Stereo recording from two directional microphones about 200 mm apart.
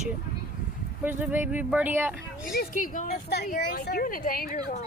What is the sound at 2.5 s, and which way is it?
A woman's voice, 40° left (ahead or behind).